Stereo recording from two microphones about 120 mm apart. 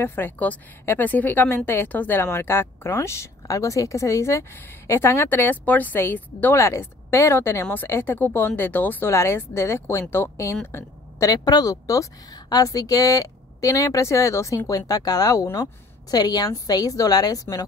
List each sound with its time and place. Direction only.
0.0 s a woman's voice: 20° left (ahead or behind)